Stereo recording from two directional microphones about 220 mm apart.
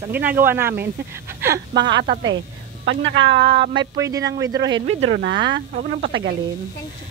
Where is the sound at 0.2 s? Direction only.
10° right (ahead or behind).